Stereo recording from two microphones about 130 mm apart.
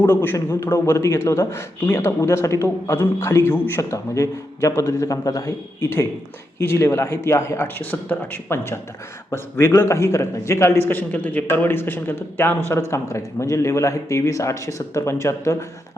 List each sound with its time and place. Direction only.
0.0 s a man's voice: 15° left (ahead or behind)